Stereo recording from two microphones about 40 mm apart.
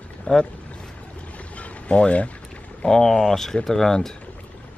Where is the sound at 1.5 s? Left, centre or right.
Left.